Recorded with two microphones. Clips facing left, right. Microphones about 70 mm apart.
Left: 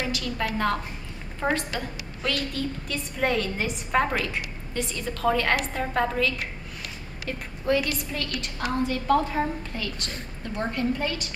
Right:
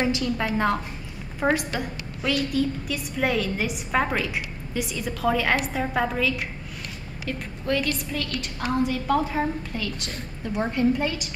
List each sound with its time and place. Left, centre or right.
0.0 s a woman's voice: centre